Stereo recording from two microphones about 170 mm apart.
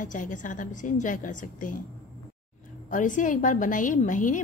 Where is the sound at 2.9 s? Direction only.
50° left (ahead or behind).